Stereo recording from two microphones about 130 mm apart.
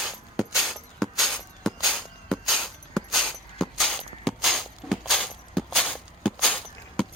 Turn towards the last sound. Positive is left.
turn(degrees=10)  # may be behind; listen again after turning